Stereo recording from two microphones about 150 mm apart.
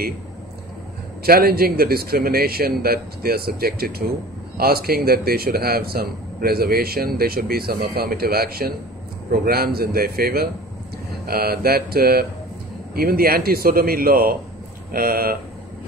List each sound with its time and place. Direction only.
1.2 s a man's voice: 90° right